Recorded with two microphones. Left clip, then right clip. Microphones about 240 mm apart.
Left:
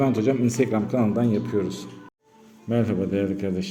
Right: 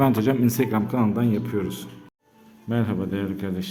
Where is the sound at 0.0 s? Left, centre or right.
Right.